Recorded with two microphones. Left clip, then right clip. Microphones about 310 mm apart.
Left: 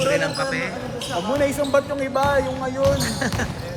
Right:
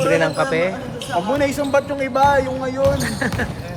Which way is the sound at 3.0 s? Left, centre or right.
Centre.